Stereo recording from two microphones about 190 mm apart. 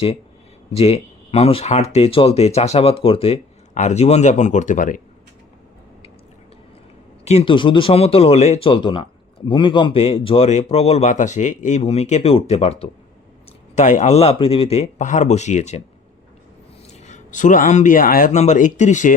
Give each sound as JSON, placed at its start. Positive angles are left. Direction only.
{"t": 0.7, "sound": "speech", "side_deg": 35}
{"t": 7.3, "sound": "speech", "side_deg": 30}
{"t": 17.0, "sound": "speech", "side_deg": 40}